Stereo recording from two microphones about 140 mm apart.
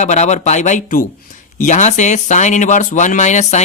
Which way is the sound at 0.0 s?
55° left (ahead or behind).